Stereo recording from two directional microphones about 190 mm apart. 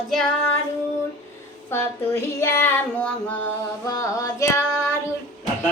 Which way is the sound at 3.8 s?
15° left (ahead or behind).